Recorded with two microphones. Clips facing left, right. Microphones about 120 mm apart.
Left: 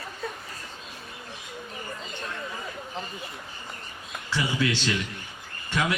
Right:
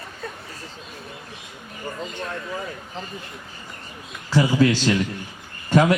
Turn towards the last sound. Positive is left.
turn(degrees=-40)  # may be behind; listen again after turning